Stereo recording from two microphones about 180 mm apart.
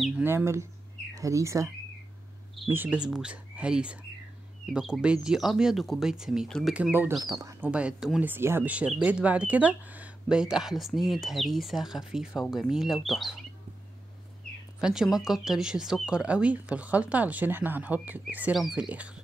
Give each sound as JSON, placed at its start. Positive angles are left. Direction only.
{"t": 0.2, "sound": "speech", "side_deg": -10}
{"t": 2.7, "sound": "speech", "side_deg": -10}
{"t": 7.6, "sound": "speech", "side_deg": -5}
{"t": 14.8, "sound": "speech", "side_deg": -5}